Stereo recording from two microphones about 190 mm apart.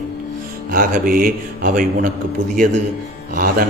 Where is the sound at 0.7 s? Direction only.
45° right (ahead or behind).